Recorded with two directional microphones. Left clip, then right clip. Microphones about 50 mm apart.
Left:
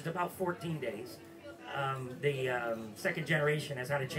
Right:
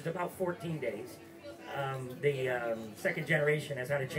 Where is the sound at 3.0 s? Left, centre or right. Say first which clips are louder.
Right 1 dB; centre.